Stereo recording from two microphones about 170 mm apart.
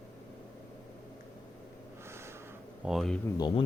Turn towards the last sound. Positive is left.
turn(degrees=25)  # may be behind; listen again after turning